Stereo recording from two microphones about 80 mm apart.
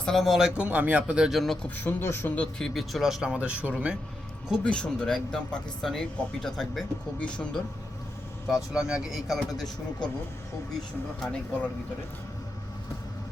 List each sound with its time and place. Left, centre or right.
0.0 s speech: centre
0.5 s speech: centre
1.3 s speech: centre
1.7 s speech: left
2.4 s speech: centre
4.6 s a man's voice: centre
8.4 s speech: centre